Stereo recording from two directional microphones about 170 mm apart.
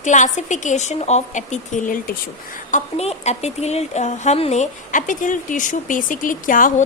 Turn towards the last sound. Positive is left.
turn(degrees=50)  # may be behind; listen again after turning